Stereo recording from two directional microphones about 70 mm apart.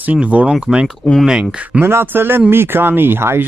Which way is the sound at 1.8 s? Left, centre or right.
Right.